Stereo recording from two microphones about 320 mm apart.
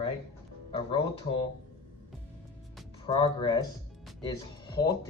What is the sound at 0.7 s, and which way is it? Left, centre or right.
Speech, centre.